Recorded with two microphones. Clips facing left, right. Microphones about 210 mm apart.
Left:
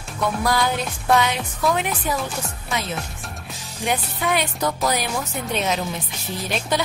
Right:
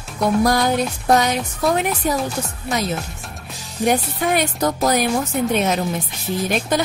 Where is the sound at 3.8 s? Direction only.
45° right (ahead or behind).